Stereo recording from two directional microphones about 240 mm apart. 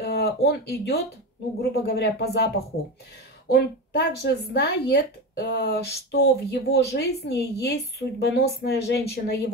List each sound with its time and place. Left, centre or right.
0.0 s speech: left
3.5 s speech: left